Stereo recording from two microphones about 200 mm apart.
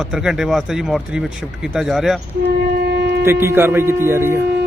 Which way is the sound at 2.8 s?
55° right (ahead or behind).